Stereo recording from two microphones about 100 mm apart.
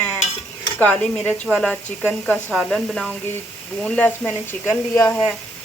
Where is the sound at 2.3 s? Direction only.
5° left (ahead or behind).